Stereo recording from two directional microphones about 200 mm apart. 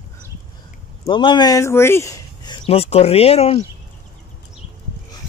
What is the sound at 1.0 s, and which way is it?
Speech, 25° left (ahead or behind).